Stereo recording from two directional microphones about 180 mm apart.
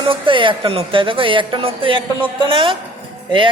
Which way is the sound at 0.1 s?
30° right (ahead or behind).